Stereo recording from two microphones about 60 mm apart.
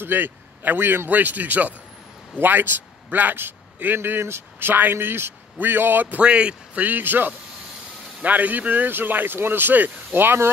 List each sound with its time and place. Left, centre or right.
0.0 s a man's voice: right
6.2 s a man's voice: centre; by 10.5 s right